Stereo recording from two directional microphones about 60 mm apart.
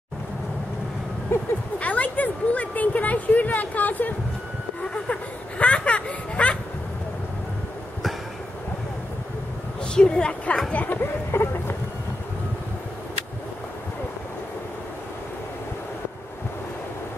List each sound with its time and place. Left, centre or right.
1.3 s speech: left
1.8 s speech: left
9.9 s a woman's voice: centre
11.0 s speech: left